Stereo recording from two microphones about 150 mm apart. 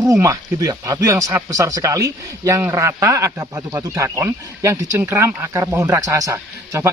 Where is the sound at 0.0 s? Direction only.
20° right (ahead or behind).